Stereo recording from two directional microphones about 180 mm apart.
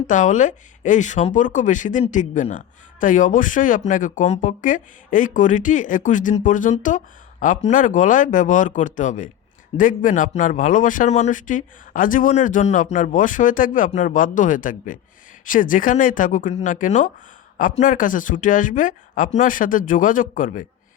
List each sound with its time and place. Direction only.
0.1 s speech: 45° left (ahead or behind)